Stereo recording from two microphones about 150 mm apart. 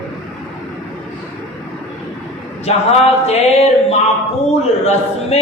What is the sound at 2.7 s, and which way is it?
A man's voice, 45° left (ahead or behind).